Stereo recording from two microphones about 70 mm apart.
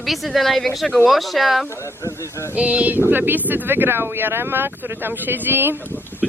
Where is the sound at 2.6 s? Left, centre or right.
Right.